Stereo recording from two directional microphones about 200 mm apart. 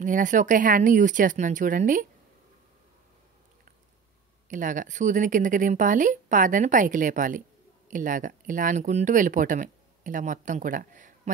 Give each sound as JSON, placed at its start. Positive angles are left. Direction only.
{"t": 0.0, "sound": "speech", "side_deg": -40}
{"t": 4.5, "sound": "speech", "side_deg": -40}